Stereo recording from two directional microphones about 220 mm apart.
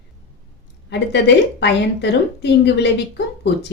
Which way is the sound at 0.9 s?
50° left (ahead or behind).